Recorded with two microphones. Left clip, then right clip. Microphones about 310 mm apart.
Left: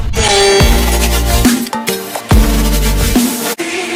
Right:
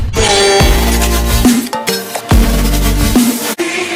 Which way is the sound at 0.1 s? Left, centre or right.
Centre.